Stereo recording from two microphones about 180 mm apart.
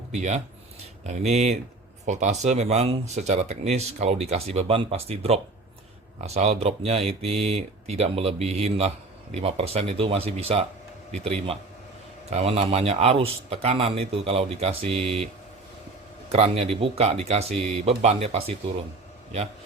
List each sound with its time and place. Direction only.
0.1 s speech: 40° right (ahead or behind)
16.3 s speech: 35° right (ahead or behind)